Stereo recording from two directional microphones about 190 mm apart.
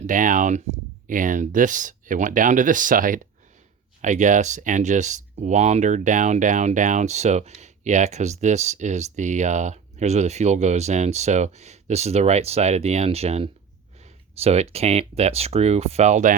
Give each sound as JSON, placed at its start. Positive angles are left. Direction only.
{"t": 0.1, "sound": "speech", "side_deg": -45}